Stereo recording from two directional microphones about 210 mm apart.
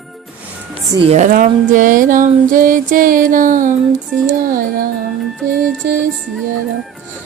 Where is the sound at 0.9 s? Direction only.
30° right (ahead or behind).